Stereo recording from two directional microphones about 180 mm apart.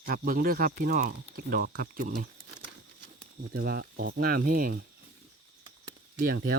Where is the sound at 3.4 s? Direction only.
60° right (ahead or behind).